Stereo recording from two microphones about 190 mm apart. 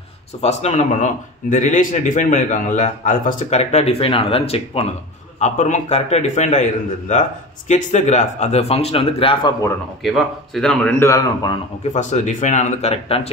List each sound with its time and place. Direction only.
0.4 s speech: 35° left (ahead or behind)
10.0 s a man's voice: centre (ahead or behind)
11.1 s a man's voice: 20° left (ahead or behind)
11.8 s speech: 40° left (ahead or behind)